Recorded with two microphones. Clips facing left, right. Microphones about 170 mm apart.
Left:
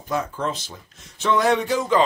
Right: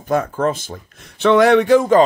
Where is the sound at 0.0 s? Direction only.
50° right (ahead or behind).